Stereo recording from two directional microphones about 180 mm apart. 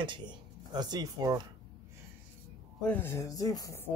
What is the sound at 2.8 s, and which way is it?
Speech, 10° left (ahead or behind).